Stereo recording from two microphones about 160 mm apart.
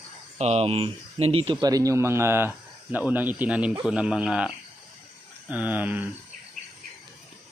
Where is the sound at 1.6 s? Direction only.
20° right (ahead or behind).